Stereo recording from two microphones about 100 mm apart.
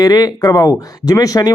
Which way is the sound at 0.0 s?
40° left (ahead or behind).